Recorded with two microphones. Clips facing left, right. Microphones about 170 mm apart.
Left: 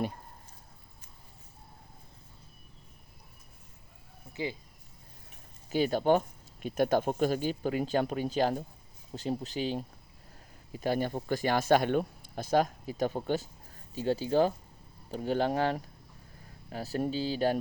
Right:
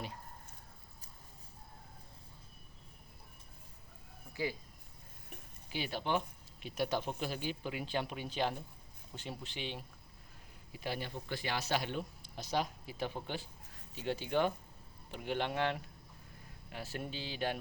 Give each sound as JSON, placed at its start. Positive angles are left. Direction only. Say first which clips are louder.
{"t": 5.6, "sound": "speech", "louder": "left 12 dB", "side_deg": 45}